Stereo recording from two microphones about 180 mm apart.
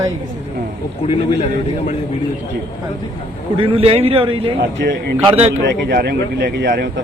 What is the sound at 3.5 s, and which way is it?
Speech, 30° right (ahead or behind).